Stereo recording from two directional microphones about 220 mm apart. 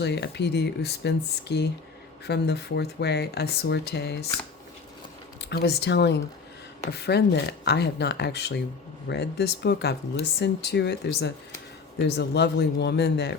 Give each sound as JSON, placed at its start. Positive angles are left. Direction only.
{"t": 0.0, "sound": "speech", "side_deg": 50}
{"t": 5.5, "sound": "speech", "side_deg": 50}